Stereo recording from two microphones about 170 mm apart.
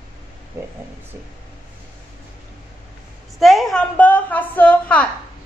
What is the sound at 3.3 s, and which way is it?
A woman's voice, centre (ahead or behind).